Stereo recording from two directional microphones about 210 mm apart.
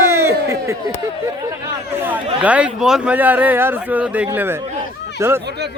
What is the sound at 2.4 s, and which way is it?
Speech, 5° right (ahead or behind).